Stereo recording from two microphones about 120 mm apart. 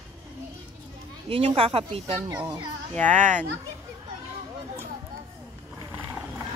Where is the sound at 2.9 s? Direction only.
90° right.